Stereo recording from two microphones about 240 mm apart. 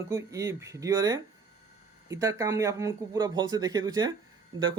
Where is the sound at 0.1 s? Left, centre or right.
Centre.